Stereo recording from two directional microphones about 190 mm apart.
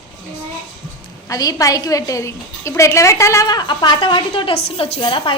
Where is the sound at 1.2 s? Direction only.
20° left (ahead or behind).